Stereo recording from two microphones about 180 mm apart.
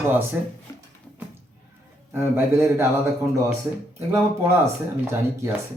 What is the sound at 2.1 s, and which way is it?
Speech, 15° right (ahead or behind).